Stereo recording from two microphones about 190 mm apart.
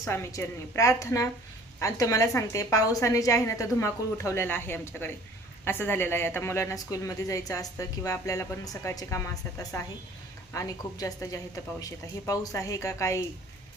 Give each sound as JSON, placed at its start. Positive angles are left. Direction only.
{"t": 0.0, "sound": "a woman's voice", "side_deg": 15}